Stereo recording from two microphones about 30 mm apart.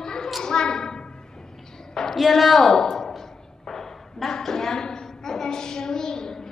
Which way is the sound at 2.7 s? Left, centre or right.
Centre.